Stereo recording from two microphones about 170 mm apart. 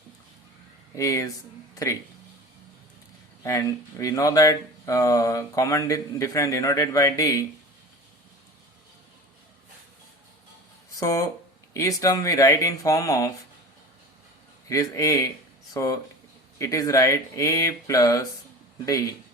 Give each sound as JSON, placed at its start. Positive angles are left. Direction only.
{"t": 0.9, "sound": "speech", "side_deg": 20}
{"t": 3.4, "sound": "speech", "side_deg": 20}
{"t": 10.9, "sound": "speech", "side_deg": 20}
{"t": 14.7, "sound": "speech", "side_deg": 20}